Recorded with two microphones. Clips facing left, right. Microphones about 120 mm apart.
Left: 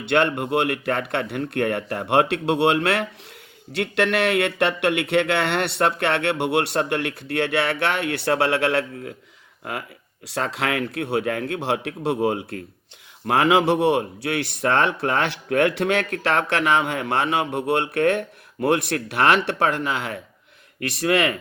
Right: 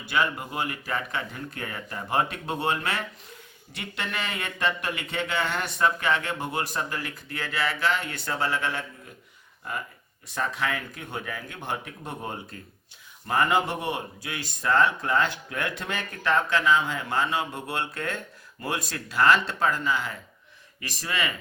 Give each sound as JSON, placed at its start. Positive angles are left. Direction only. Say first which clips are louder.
{"t": 0.0, "sound": "speech", "louder": "left 7 dB", "side_deg": 75}
{"t": 3.7, "sound": "speech", "louder": "left 13 dB", "side_deg": 80}
{"t": 10.2, "sound": "speech", "louder": "left 4 dB", "side_deg": 80}
{"t": 13.2, "sound": "speech", "louder": "left 6 dB", "side_deg": 85}